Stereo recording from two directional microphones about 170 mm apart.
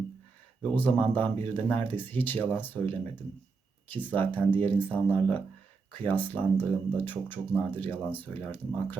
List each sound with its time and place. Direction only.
0.6 s speech: 10° left (ahead or behind)